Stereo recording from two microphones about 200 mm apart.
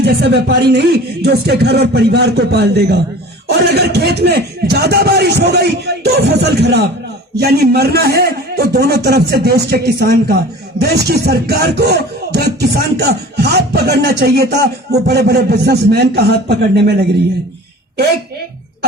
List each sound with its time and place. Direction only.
0.0 s a man's voice: 55° right (ahead or behind)